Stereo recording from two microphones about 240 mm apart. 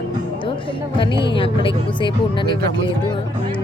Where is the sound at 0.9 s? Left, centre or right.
Left.